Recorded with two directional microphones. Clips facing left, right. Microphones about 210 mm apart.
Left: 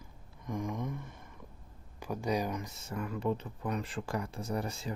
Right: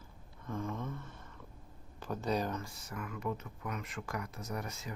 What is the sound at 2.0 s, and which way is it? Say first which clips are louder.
Speech: left 2 dB; 10° left (ahead or behind).